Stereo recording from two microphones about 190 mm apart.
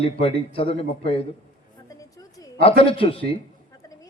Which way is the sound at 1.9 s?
20° left (ahead or behind).